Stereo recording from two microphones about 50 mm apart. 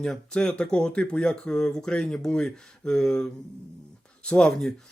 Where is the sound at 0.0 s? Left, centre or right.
Centre.